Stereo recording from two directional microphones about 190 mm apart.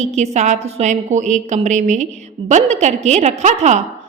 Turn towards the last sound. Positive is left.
turn(degrees=-35)  # may be behind; listen again after turning